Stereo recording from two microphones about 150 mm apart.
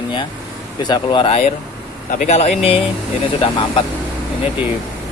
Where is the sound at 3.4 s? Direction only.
35° left (ahead or behind).